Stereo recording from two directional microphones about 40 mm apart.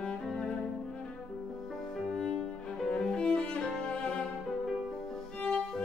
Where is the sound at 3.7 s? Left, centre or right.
Centre.